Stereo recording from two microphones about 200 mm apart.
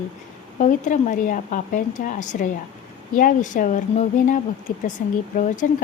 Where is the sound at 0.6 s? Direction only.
40° left (ahead or behind).